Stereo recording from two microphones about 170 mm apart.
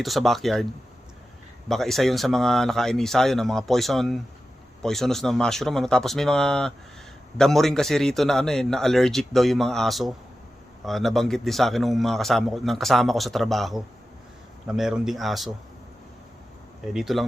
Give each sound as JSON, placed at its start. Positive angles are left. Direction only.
{"t": 0.0, "sound": "a man's voice", "side_deg": 0}
{"t": 16.8, "sound": "a man's voice", "side_deg": 0}